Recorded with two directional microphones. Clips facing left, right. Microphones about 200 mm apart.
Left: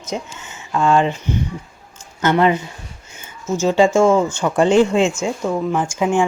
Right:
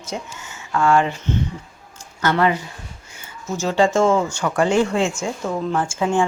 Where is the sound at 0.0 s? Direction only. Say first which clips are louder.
Left 3 dB; 20° left (ahead or behind).